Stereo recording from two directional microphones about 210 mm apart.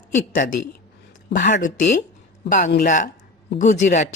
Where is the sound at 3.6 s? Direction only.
35° left (ahead or behind).